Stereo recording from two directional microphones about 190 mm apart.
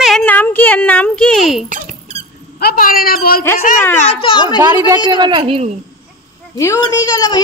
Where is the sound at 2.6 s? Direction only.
50° left (ahead or behind).